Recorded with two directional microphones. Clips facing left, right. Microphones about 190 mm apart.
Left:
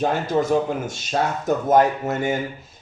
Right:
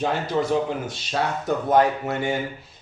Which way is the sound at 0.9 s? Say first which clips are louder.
Left 2 dB; 45° left (ahead or behind).